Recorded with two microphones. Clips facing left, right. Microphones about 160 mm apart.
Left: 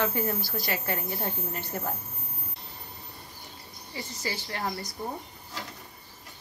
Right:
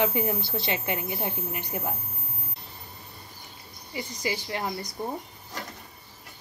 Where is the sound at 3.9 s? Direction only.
15° right (ahead or behind).